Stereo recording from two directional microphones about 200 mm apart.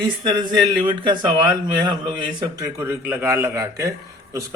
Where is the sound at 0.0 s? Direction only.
20° right (ahead or behind).